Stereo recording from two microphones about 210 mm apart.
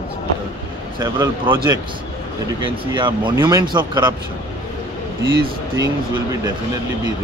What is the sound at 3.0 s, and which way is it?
Speech, 20° right (ahead or behind).